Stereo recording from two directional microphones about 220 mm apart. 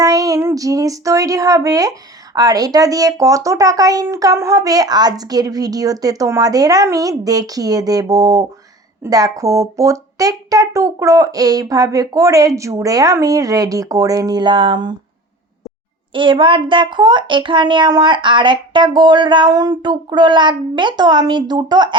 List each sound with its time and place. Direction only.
0.0 s speech: 15° right (ahead or behind)
16.1 s a child's voice: 20° right (ahead or behind)